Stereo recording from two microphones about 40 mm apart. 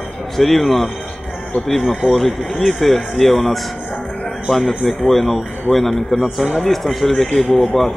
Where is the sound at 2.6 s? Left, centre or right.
Centre.